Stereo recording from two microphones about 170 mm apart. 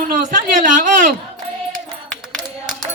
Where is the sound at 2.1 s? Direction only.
Centre (ahead or behind).